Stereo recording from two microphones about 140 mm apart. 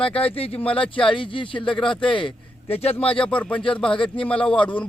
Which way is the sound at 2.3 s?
45° left (ahead or behind).